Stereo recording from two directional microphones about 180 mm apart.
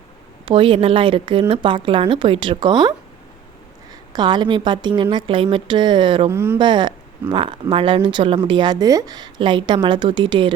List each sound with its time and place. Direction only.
0.4 s speech: 30° right (ahead or behind)
4.1 s speech: 25° right (ahead or behind)
6.3 s speech: 15° right (ahead or behind)
6.6 s speech: 25° right (ahead or behind)